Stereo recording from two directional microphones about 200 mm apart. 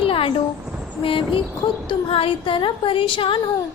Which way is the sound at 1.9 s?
30° left (ahead or behind).